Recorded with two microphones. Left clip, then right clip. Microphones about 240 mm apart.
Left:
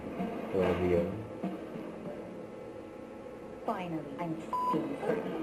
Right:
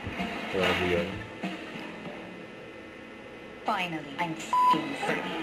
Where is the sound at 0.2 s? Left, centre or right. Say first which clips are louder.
Right 3 dB; centre.